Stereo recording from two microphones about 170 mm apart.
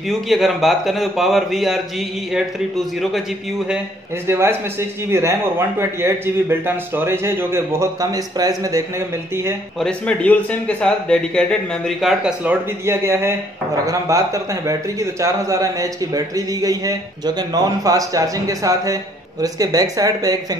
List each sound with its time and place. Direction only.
0.1 s a man's voice: centre (ahead or behind)
4.3 s a man's voice: 15° right (ahead or behind)
9.8 s a man's voice: 5° left (ahead or behind); by 20.3 s 20° right (ahead or behind)